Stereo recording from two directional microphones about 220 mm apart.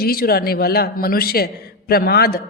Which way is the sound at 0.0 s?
45° left (ahead or behind).